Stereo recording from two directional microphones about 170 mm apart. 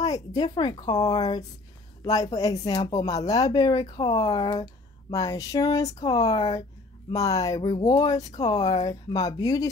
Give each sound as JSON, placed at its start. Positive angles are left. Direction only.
{"t": 0.0, "sound": "speech", "side_deg": 20}